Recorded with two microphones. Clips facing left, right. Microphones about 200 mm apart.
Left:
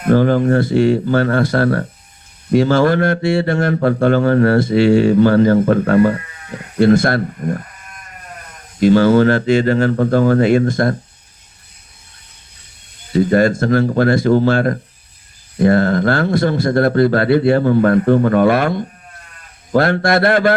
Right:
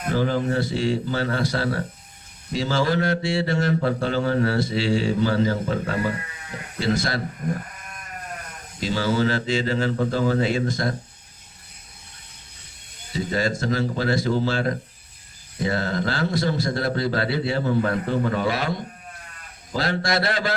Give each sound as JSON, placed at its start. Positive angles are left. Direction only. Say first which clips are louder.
{"t": 0.1, "sound": "speech", "louder": "left 10 dB", "side_deg": 60}
{"t": 8.8, "sound": "speech", "louder": "left 12 dB", "side_deg": 55}
{"t": 13.1, "sound": "speech", "louder": "left 11 dB", "side_deg": 55}